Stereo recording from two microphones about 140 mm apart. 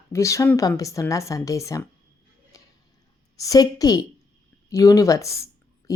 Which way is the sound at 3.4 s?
25° left (ahead or behind).